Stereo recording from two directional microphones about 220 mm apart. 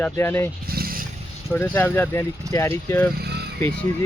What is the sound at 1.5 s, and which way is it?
Speech, 10° left (ahead or behind).